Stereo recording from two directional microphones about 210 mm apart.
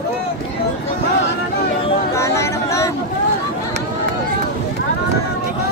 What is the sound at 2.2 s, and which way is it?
Chatter, 15° left (ahead or behind).